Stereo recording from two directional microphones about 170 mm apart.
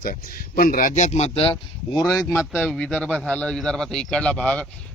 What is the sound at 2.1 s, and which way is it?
A man's voice, 10° left (ahead or behind).